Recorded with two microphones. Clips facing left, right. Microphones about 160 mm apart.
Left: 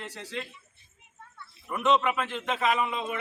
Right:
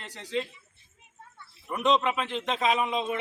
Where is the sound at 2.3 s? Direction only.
25° right (ahead or behind).